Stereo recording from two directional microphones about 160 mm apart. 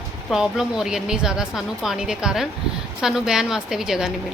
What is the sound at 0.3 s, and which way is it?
A woman's voice, 5° right (ahead or behind).